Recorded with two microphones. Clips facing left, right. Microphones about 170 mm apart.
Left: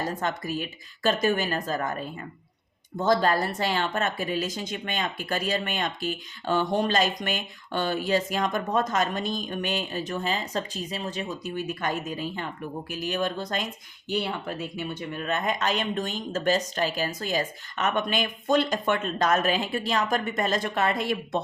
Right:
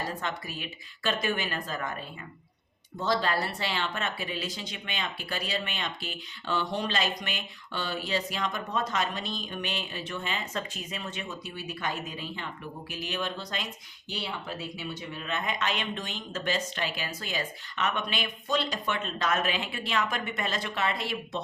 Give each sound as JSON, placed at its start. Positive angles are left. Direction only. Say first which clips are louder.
{"t": 0.2, "sound": "speech", "louder": "left 6 dB", "side_deg": 45}